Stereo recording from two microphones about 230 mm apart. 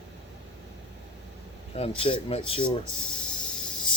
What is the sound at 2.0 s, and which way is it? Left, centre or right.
Speech, left.